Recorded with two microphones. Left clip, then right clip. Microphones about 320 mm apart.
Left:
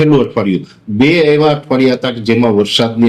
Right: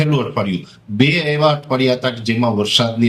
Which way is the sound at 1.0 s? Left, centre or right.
Right.